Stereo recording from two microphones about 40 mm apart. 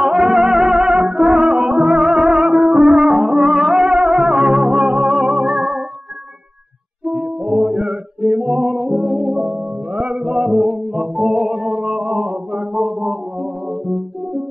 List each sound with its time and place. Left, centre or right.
0.0 s music: centre
7.1 s music: right